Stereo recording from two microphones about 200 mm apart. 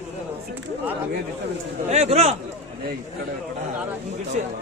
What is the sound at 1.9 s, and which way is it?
Speech, 35° right (ahead or behind).